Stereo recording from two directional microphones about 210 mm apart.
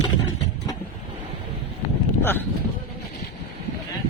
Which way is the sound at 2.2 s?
10° left (ahead or behind).